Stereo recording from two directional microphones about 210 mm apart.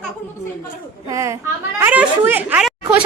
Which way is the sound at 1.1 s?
15° right (ahead or behind).